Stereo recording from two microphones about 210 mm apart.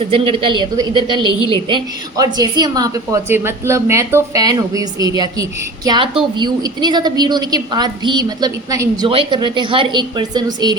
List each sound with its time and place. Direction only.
0.1 s a woman's voice: 25° right (ahead or behind)